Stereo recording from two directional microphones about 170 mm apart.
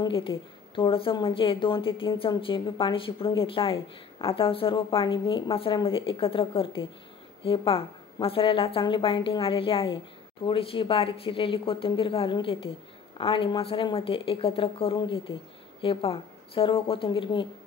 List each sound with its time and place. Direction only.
0.0 s a woman's voice: 30° left (ahead or behind)